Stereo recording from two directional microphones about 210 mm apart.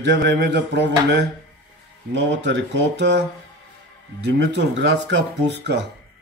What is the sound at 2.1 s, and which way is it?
Speech, 55° right (ahead or behind).